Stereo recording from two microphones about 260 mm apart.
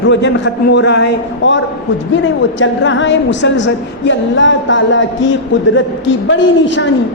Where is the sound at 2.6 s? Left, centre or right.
Left.